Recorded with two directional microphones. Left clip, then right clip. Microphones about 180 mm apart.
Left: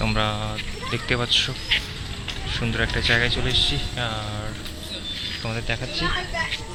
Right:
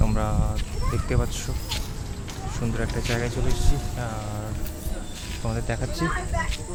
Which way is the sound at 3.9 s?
5° left (ahead or behind).